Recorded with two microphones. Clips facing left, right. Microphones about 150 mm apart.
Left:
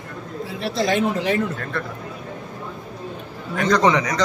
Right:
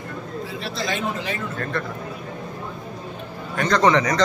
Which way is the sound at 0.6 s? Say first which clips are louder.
Left 8 dB; 60° left (ahead or behind).